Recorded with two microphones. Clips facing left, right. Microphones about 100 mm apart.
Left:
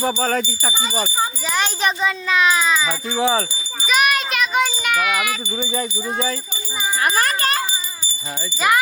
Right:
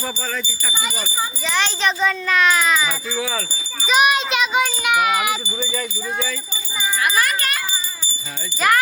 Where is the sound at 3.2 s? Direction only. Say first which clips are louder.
Left 8 dB; 25° left (ahead or behind).